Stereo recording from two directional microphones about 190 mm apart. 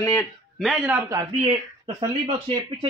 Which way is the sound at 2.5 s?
30° right (ahead or behind).